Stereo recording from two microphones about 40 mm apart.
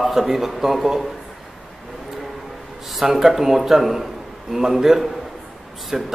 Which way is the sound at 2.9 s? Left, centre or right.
Centre.